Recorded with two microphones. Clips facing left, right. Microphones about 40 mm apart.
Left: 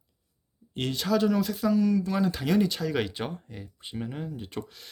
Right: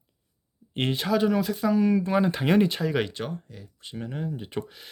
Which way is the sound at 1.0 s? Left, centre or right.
Centre.